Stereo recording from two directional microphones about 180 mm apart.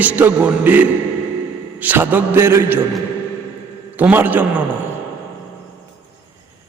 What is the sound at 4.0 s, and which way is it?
Speech, 10° right (ahead or behind).